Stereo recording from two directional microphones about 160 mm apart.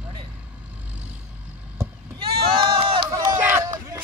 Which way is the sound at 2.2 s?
35° right (ahead or behind).